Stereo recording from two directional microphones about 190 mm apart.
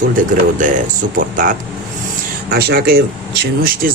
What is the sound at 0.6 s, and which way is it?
Speech, 45° right (ahead or behind).